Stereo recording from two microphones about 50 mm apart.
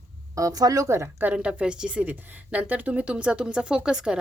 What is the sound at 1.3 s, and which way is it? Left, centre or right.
Speech, right.